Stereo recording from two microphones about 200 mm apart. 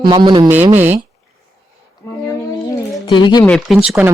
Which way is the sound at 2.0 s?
15° left (ahead or behind).